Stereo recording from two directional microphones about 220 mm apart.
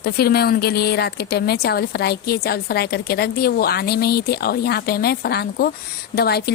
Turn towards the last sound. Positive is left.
turn(degrees=45)  # may be behind; listen again after turning